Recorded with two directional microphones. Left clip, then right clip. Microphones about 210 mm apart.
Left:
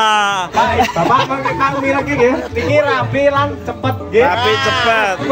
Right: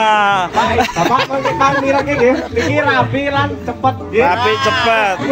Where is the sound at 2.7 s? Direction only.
45° left (ahead or behind).